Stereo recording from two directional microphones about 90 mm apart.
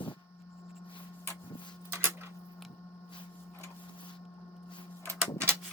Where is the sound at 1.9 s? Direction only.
25° right (ahead or behind).